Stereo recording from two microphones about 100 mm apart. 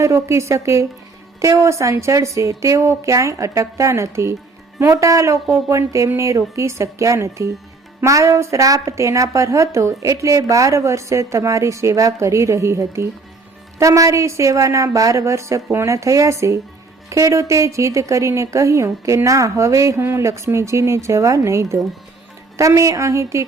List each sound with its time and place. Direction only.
0.0 s a woman's voice: 30° right (ahead or behind)